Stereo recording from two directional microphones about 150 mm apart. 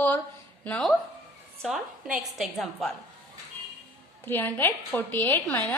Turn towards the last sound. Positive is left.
turn(degrees=10)  # may be behind; listen again after turning